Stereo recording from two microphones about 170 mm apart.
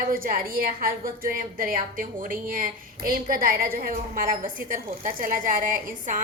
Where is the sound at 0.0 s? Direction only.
55° right (ahead or behind).